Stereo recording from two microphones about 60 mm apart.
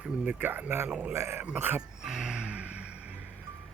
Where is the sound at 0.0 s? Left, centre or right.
Right.